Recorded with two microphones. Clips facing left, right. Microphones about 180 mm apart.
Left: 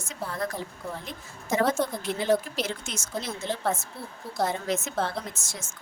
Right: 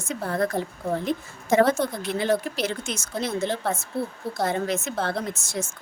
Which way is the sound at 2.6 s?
65° right (ahead or behind).